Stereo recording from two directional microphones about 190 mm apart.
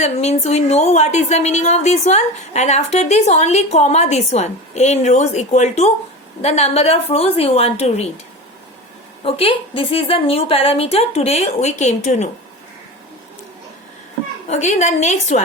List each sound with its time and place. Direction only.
0.0 s a woman's voice: 35° left (ahead or behind)
9.2 s a woman's voice: 30° left (ahead or behind)
14.5 s a woman's voice: 35° left (ahead or behind)